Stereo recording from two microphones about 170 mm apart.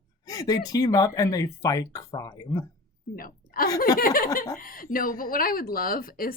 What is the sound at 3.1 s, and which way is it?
A woman's voice, 60° left (ahead or behind).